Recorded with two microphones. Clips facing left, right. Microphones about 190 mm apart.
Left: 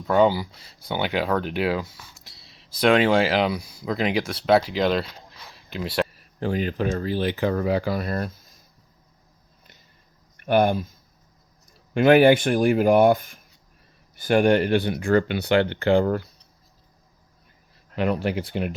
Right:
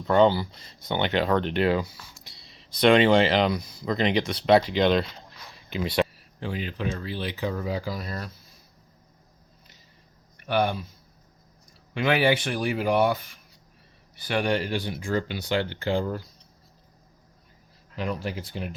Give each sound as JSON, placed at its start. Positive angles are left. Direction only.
{"t": 0.0, "sound": "speech", "side_deg": 5}
{"t": 6.4, "sound": "speech", "side_deg": 45}
{"t": 10.3, "sound": "speech", "side_deg": 50}
{"t": 11.9, "sound": "speech", "side_deg": 50}
{"t": 17.9, "sound": "speech", "side_deg": 65}